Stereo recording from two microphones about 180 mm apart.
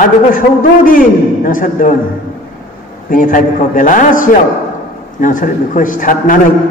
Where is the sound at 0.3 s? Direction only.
50° left (ahead or behind).